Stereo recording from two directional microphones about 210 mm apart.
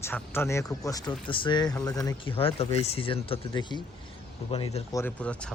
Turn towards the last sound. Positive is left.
turn(degrees=5)  # may be behind; listen again after turning